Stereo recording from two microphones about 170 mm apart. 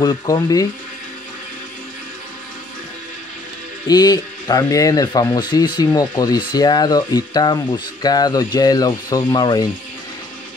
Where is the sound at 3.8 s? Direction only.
20° left (ahead or behind).